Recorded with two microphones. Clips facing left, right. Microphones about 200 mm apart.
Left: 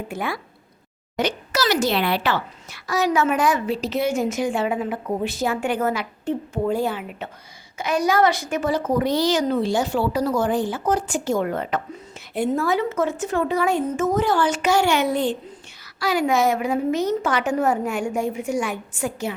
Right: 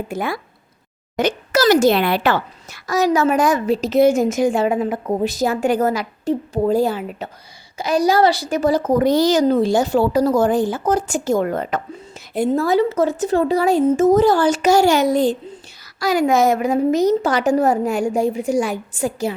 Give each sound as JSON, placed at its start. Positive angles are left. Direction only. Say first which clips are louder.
{"t": 0.1, "sound": "a woman's voice", "louder": "right 4 dB", "side_deg": -40}